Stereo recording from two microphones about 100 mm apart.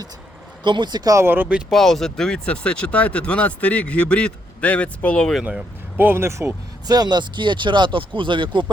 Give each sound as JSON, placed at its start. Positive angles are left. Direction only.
{"t": 0.6, "sound": "speech", "side_deg": -50}
{"t": 1.1, "sound": "speech", "side_deg": -25}
{"t": 1.7, "sound": "speech", "side_deg": 5}
{"t": 5.5, "sound": "speech", "side_deg": -15}